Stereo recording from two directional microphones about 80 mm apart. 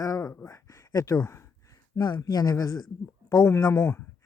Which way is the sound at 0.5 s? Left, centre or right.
Left.